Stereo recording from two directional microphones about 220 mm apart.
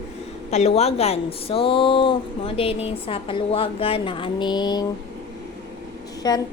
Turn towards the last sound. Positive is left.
turn(degrees=15)  # may be behind; listen again after turning